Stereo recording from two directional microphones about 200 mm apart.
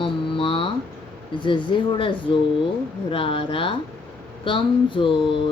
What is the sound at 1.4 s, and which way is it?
Speech, 25° left (ahead or behind).